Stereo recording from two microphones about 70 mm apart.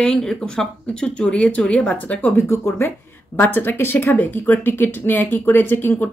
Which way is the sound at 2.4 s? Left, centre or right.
Left.